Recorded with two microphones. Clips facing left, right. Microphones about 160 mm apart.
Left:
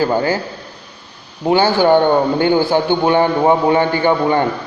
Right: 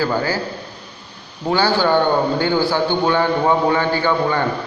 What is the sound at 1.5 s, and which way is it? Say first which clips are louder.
A man's voice: left 5 dB; 20° left (ahead or behind).